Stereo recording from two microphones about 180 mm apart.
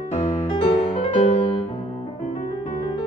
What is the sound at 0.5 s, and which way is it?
Music, 30° left (ahead or behind).